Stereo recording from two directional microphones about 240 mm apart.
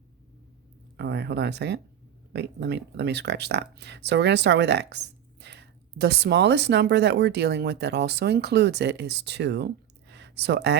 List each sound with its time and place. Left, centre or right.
0.9 s speech: right